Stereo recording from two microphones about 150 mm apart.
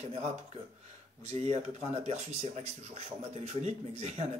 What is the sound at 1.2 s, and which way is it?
Speech, 45° right (ahead or behind).